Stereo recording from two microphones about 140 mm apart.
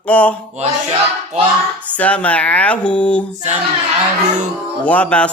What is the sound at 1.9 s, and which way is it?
Mantra, 10° left (ahead or behind).